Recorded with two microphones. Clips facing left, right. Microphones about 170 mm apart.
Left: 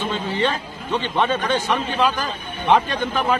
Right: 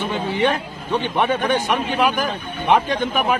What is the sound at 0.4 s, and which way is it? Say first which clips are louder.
A man's voice: right 3 dB; 15° right (ahead or behind).